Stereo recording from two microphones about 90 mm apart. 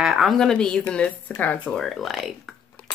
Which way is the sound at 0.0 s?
Centre (ahead or behind).